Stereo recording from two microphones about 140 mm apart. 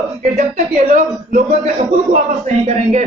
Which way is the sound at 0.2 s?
65° right (ahead or behind).